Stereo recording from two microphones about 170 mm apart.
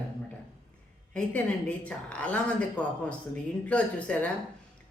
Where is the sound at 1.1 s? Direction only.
5° left (ahead or behind).